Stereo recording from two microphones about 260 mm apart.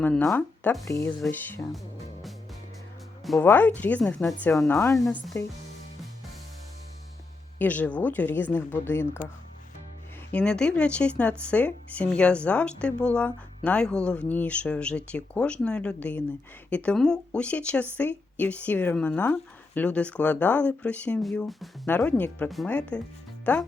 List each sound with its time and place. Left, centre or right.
0.0 s speech: centre
3.3 s speech: centre
7.6 s speech: centre
10.3 s speech: centre